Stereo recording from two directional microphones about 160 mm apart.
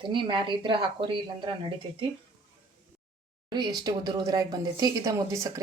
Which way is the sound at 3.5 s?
25° right (ahead or behind).